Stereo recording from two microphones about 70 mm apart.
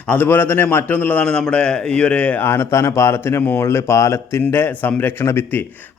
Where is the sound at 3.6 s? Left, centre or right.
Left.